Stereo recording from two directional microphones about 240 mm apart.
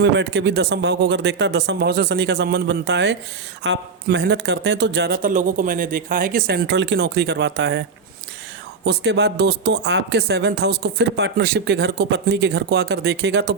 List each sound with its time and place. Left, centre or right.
0.0 s speech: right